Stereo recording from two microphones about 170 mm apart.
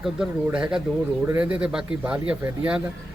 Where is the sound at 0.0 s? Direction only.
5° right (ahead or behind).